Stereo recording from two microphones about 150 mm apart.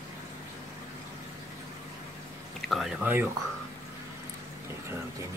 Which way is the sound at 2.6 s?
Centre (ahead or behind).